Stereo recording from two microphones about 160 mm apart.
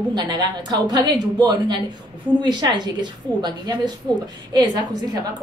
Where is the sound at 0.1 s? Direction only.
25° right (ahead or behind).